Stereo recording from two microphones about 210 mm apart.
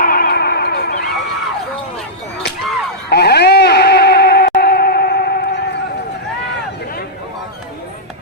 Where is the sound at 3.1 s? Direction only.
50° left (ahead or behind).